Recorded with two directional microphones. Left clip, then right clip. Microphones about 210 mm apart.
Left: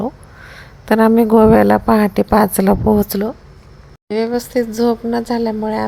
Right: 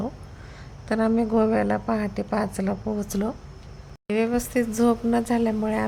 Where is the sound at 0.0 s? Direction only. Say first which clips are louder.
Left 9 dB; 25° left (ahead or behind).